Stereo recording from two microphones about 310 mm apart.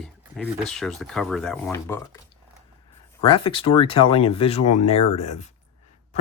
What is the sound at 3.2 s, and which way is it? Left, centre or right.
Speech, centre.